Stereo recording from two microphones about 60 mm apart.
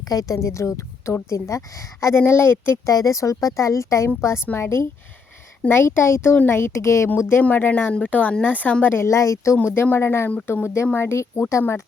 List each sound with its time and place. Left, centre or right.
0.1 s a woman's voice: left
0.3 s a woman's voice: left
2.1 s speech: left
2.9 s a woman's voice: left
6.8 s a woman's voice: left
7.2 s speech: left
7.4 s speech: left
8.9 s a woman's voice: left
10.0 s speech: left